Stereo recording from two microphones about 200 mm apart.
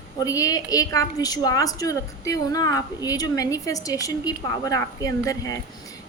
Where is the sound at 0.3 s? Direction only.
15° left (ahead or behind).